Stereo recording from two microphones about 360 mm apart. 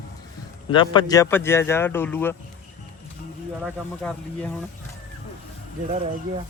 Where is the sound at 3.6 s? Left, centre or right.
Centre.